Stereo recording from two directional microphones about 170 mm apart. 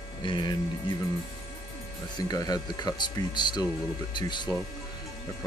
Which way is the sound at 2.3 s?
20° left (ahead or behind).